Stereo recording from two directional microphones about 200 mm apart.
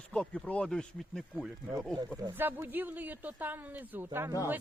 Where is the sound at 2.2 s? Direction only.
15° right (ahead or behind).